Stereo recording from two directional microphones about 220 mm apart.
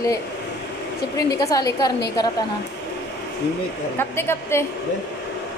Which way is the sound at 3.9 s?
10° left (ahead or behind).